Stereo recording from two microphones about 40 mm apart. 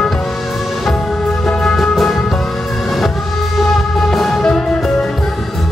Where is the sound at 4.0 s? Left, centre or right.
Centre.